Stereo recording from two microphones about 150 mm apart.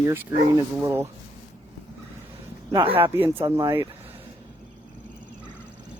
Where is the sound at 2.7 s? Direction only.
35° right (ahead or behind).